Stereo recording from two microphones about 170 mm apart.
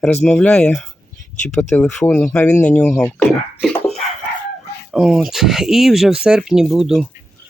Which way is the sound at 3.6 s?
Centre (ahead or behind).